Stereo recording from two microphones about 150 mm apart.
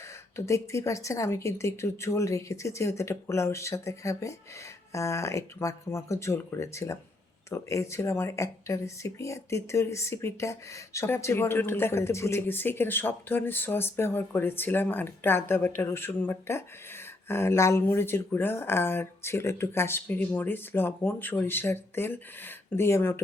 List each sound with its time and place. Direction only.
0.3 s a woman's voice: 20° left (ahead or behind)